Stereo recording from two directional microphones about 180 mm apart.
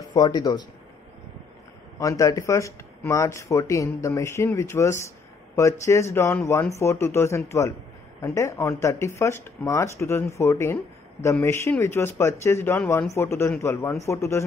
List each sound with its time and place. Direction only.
0.0 s speech: 20° left (ahead or behind)
2.0 s speech: 20° left (ahead or behind)